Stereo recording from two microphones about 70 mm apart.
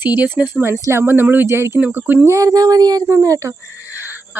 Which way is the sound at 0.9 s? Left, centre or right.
Right.